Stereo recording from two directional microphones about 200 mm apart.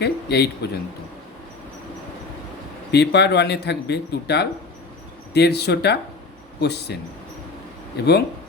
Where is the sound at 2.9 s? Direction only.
55° left (ahead or behind).